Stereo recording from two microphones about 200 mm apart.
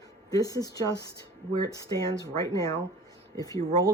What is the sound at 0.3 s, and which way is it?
Speech, 15° left (ahead or behind).